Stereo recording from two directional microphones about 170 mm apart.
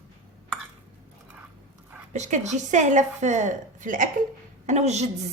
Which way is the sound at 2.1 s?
45° right (ahead or behind).